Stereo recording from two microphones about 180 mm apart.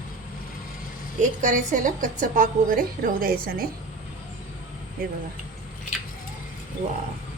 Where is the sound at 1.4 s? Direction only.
45° right (ahead or behind).